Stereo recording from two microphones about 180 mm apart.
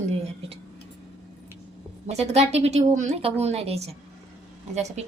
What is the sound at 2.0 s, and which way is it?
A woman's voice, 35° right (ahead or behind).